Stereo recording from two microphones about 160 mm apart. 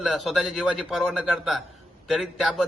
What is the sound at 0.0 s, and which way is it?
A man's voice, centre (ahead or behind).